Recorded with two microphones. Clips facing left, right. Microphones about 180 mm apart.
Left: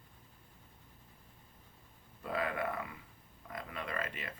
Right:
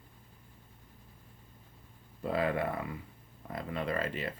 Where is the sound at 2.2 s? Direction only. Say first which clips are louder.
Right 5 dB; 30° right (ahead or behind).